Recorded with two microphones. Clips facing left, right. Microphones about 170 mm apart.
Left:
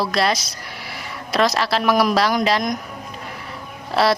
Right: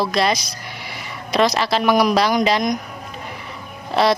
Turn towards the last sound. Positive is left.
turn(degrees=0)  # may be behind; listen again after turning